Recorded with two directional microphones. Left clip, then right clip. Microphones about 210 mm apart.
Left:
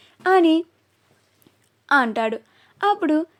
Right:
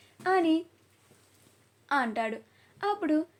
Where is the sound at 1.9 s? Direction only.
45° left (ahead or behind).